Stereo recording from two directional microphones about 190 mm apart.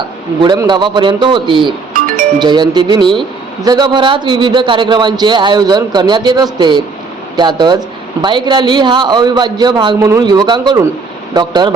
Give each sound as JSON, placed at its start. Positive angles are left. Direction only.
{"t": 0.4, "sound": "speech", "side_deg": -25}